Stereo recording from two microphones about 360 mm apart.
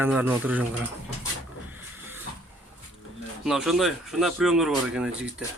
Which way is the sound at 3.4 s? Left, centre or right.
Centre.